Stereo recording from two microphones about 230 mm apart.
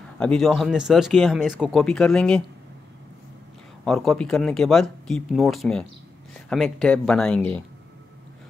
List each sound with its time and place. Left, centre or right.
0.2 s speech: centre
3.8 s speech: centre